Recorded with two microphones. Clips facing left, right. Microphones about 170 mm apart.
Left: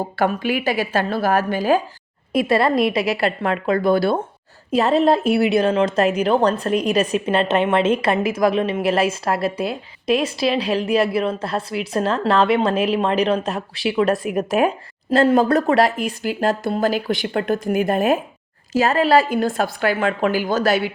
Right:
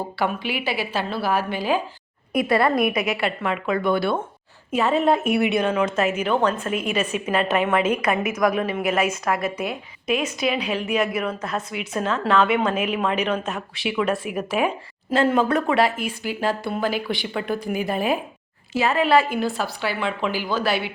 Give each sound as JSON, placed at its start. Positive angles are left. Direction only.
{"t": 0.2, "sound": "a woman's voice", "side_deg": 45}
{"t": 2.3, "sound": "a woman's voice", "side_deg": 25}